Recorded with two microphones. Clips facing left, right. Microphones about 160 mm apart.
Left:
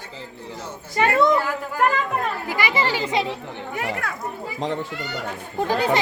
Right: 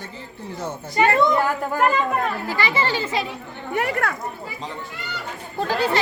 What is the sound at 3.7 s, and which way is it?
Speech, 60° right (ahead or behind).